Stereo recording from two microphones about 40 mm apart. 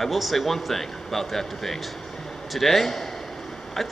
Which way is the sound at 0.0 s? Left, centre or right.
Centre.